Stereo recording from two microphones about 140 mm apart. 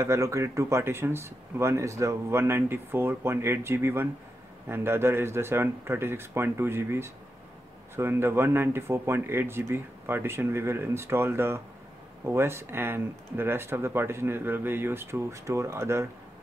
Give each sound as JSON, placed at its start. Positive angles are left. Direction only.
{"t": 0.0, "sound": "speech", "side_deg": -20}